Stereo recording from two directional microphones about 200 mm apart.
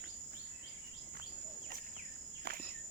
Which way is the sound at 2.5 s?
55° right (ahead or behind).